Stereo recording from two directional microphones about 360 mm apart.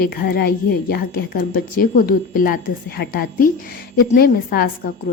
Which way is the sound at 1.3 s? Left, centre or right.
Left.